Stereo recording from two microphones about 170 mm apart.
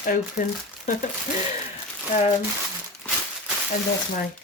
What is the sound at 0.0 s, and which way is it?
Speech, 55° left (ahead or behind).